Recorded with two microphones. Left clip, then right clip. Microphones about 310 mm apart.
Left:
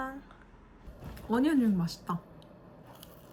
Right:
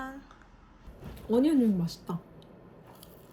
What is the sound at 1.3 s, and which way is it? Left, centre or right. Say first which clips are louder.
Speech: right 3 dB; centre.